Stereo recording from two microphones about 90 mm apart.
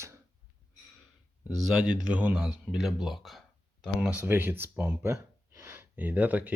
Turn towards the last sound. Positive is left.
turn(degrees=-15)  # may be behind; listen again after turning